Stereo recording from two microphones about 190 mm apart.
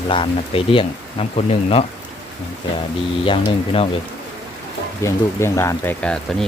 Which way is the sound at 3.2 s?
30° left (ahead or behind).